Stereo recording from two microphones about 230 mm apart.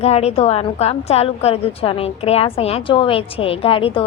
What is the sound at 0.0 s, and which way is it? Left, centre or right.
A woman's voice, left.